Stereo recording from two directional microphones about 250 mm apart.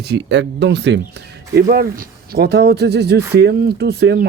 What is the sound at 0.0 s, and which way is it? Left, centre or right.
Speech, right.